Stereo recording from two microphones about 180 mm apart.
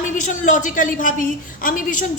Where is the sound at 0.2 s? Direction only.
45° left (ahead or behind).